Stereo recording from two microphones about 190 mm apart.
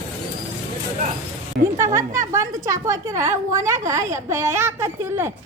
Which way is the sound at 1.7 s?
15° right (ahead or behind).